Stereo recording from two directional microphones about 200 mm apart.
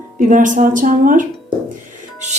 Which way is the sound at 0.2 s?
40° right (ahead or behind).